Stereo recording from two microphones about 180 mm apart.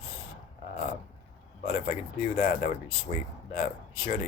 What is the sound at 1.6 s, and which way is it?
Speech, 45° left (ahead or behind).